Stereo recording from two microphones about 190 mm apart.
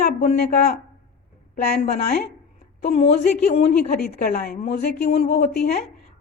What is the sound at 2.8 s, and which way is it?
Speech, 35° left (ahead or behind).